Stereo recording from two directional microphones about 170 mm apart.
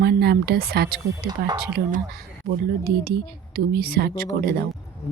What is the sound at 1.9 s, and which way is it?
Speech, 55° right (ahead or behind).